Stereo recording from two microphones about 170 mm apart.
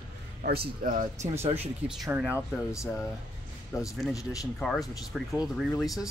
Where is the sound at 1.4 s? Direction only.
40° right (ahead or behind).